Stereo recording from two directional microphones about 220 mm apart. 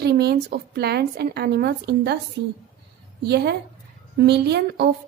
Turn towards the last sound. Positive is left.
turn(degrees=-50)  # may be behind; listen again after turning